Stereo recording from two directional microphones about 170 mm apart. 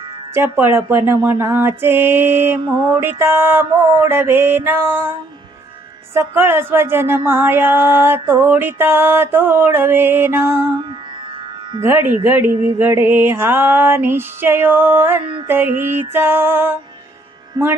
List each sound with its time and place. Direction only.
0.3 s music: 15° right (ahead or behind)
2.6 s mantra: 25° right (ahead or behind)
2.9 s music: 15° right (ahead or behind)
6.1 s music: 15° right (ahead or behind)
11.8 s music: 15° right (ahead or behind)